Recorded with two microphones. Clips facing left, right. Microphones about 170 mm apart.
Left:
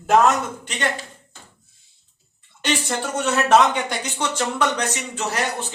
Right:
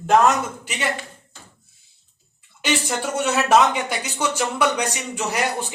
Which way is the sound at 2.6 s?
10° right (ahead or behind).